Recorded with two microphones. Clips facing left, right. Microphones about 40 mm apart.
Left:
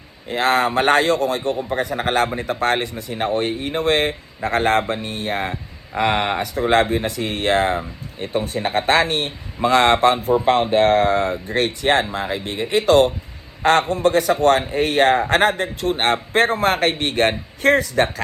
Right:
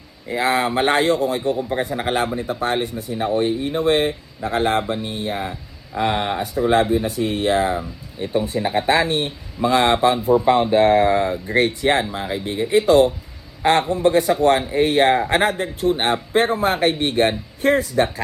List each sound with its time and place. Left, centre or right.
0.3 s a man's voice: left